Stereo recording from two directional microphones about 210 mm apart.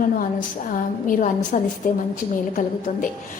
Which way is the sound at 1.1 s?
40° left (ahead or behind).